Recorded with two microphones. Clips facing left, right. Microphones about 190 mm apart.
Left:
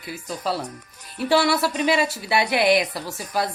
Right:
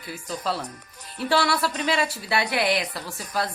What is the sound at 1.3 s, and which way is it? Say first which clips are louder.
Speech: left 3 dB; 15° left (ahead or behind).